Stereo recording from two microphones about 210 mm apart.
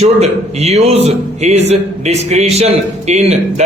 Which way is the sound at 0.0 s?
30° right (ahead or behind).